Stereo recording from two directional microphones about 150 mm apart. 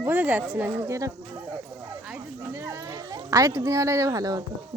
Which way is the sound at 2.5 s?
20° right (ahead or behind).